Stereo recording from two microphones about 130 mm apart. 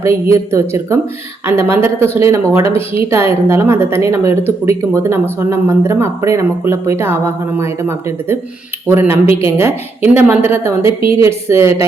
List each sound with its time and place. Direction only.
0.0 s a woman's voice: 20° right (ahead or behind)